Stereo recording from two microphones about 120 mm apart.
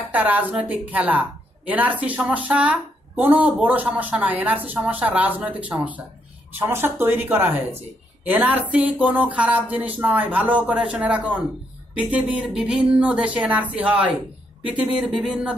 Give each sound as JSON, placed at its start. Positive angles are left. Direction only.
{"t": 0.1, "sound": "a woman's voice", "side_deg": -15}